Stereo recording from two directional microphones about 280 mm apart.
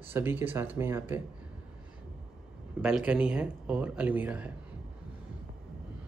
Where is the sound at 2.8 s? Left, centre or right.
Centre.